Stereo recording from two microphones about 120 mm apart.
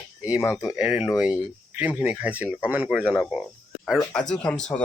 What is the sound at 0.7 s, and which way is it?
Speech, 10° right (ahead or behind).